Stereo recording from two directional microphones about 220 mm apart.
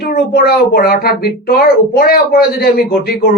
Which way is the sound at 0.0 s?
45° left (ahead or behind).